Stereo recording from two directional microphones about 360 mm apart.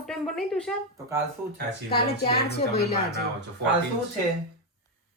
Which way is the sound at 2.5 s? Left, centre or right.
Left.